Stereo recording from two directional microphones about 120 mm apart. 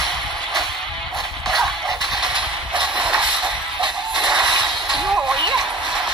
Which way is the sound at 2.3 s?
40° right (ahead or behind).